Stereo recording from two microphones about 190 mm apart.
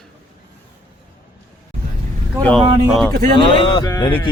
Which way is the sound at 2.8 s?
Centre (ahead or behind).